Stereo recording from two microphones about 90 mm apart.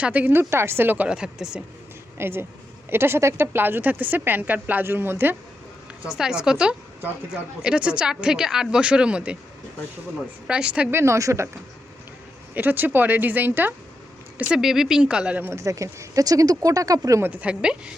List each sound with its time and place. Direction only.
0.0 s speech: 15° right (ahead or behind)
2.1 s a woman's voice: 25° right (ahead or behind)
6.1 s speech: 10° right (ahead or behind)
10.4 s speech: 10° right (ahead or behind)
10.9 s speech: 30° right (ahead or behind)
12.5 s a woman's voice: 20° right (ahead or behind)
14.3 s speech: 10° right (ahead or behind)
15.4 s speech: 35° right (ahead or behind)
17.2 s speech: 15° right (ahead or behind)